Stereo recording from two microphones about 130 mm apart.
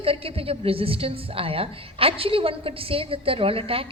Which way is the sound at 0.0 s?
45° right (ahead or behind).